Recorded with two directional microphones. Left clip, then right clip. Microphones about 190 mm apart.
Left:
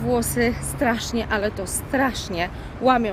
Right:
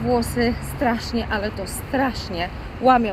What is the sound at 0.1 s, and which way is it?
A woman's voice, 20° left (ahead or behind).